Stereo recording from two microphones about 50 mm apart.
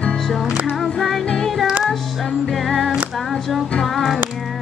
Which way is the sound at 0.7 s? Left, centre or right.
Centre.